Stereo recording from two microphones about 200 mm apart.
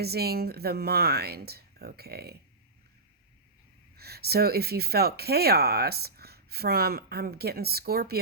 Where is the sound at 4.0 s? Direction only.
50° right (ahead or behind).